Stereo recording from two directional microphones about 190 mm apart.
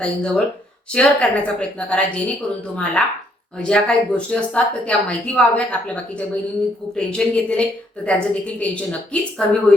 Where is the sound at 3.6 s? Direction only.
5° left (ahead or behind).